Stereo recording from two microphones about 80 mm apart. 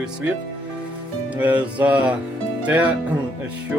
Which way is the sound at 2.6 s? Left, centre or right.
Centre.